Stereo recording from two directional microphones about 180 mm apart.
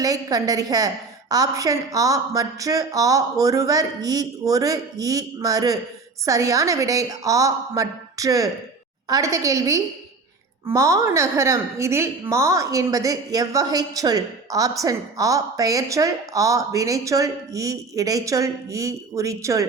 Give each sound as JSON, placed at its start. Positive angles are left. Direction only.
{"t": 0.0, "sound": "a woman's voice", "side_deg": -20}